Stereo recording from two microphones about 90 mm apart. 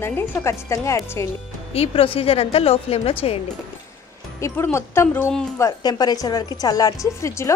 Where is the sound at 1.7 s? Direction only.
90° left.